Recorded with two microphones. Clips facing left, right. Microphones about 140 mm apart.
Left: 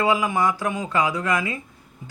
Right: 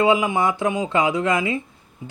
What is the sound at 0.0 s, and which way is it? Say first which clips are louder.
A man's voice: right 3 dB; 20° right (ahead or behind).